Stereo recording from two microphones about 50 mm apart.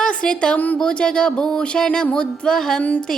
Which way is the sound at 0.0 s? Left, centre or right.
Centre.